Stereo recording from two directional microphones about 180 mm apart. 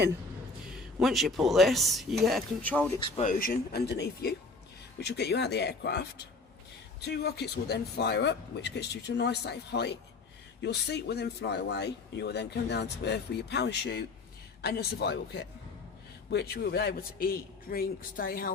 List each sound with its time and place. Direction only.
0.7 s a man's voice: 5° right (ahead or behind)
3.2 s a man's voice: 50° left (ahead or behind)